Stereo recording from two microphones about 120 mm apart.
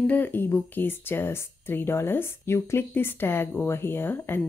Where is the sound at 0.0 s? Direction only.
15° left (ahead or behind).